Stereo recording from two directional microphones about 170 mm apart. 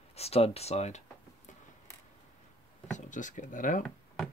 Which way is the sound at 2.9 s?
50° left (ahead or behind).